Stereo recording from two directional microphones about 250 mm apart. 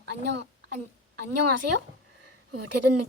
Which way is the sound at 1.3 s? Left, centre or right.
Right.